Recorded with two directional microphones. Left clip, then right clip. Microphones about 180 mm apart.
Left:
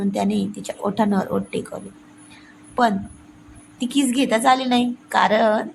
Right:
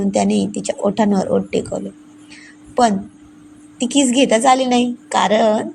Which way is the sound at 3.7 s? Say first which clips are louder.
Right 6 dB; 15° right (ahead or behind).